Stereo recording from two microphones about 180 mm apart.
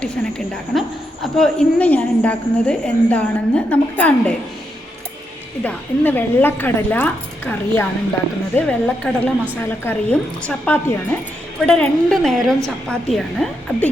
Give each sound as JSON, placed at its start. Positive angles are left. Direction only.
{"t": 0.0, "sound": "a woman's voice", "side_deg": 5}
{"t": 5.6, "sound": "a woman's voice", "side_deg": 10}